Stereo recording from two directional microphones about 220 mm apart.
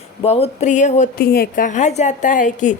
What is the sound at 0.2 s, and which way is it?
A woman's voice, 25° left (ahead or behind).